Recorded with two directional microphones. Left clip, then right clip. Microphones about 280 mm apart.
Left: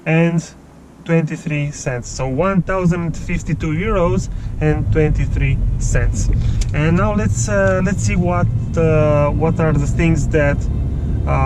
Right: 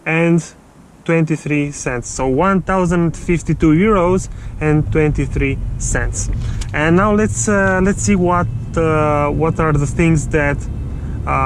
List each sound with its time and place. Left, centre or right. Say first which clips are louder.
0.0 s speech: right 2 dB; right